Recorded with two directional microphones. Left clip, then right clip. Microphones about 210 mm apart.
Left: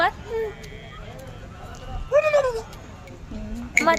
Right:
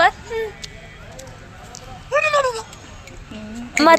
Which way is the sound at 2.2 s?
25° left (ahead or behind).